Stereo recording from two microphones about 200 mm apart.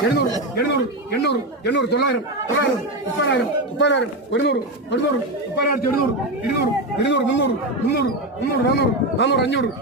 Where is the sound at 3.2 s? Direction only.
60° left (ahead or behind).